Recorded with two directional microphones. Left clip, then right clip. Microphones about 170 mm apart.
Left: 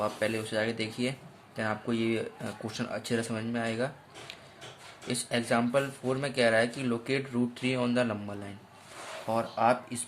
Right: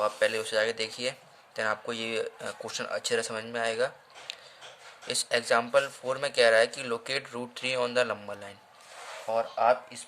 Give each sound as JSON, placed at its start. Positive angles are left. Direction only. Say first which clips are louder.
{"t": 0.0, "sound": "speech", "louder": "right 4 dB", "side_deg": -25}
{"t": 9.3, "sound": "speech", "louder": "right 2 dB", "side_deg": -5}